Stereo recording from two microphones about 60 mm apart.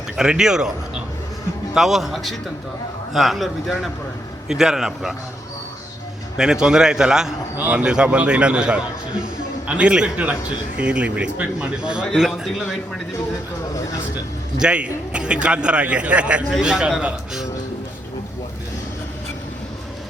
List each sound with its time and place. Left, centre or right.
0.2 s a man's voice: centre
6.3 s a man's voice: centre
14.6 s a man's voice: centre